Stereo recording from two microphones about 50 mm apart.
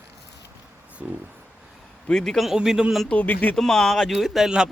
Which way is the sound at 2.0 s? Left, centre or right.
Centre.